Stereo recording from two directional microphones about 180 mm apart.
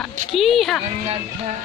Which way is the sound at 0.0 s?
Centre (ahead or behind).